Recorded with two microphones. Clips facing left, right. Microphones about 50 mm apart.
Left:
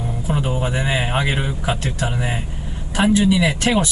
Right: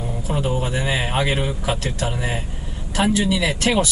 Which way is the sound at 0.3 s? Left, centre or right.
Centre.